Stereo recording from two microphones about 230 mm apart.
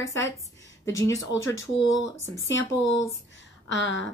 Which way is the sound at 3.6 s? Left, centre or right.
Left.